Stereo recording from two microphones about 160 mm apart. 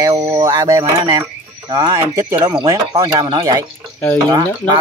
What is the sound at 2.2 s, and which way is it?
Speech, 15° right (ahead or behind).